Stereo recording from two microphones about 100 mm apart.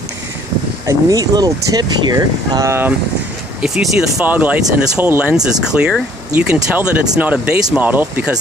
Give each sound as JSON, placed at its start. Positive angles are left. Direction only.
{"t": 0.8, "sound": "speech", "side_deg": -35}
{"t": 3.6, "sound": "speech", "side_deg": -5}